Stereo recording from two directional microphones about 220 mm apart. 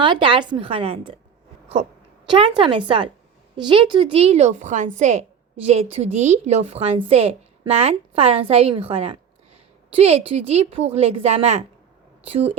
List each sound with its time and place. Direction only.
0.0 s a woman's voice: 20° right (ahead or behind)
2.6 s a woman's voice: 20° right (ahead or behind)